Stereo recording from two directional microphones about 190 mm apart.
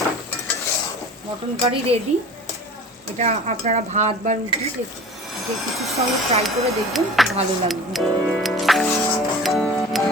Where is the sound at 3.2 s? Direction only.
35° right (ahead or behind).